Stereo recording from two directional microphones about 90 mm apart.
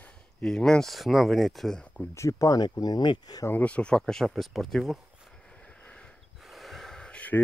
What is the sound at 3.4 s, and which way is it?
Speech, 15° left (ahead or behind).